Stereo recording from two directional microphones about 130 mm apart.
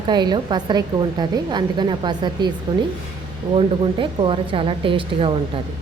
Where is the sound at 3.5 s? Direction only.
45° right (ahead or behind).